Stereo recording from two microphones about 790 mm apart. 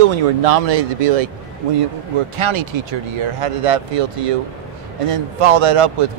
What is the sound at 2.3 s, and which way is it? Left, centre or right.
Speech, right.